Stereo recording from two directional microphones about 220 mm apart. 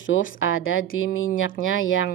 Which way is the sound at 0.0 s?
60° left (ahead or behind).